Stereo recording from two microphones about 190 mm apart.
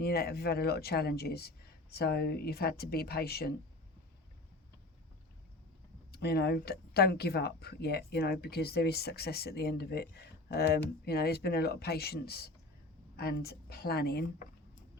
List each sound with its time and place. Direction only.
0.0 s speech: 55° left (ahead or behind)
6.1 s speech: 55° left (ahead or behind)